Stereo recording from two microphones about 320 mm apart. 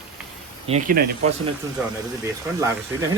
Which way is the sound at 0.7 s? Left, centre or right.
Right.